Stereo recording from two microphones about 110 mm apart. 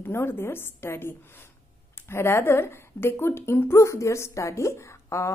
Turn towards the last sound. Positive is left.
turn(degrees=25)  # may be behind; listen again after turning